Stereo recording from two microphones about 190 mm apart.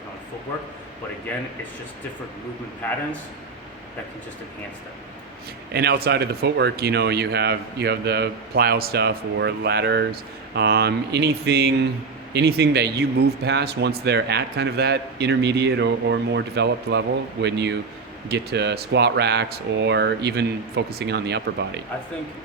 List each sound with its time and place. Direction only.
2.8 s a man's voice: 10° left (ahead or behind)
5.7 s speech: 55° right (ahead or behind)